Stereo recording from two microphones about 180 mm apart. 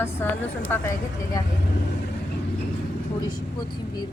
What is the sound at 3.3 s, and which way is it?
Speech, 25° left (ahead or behind).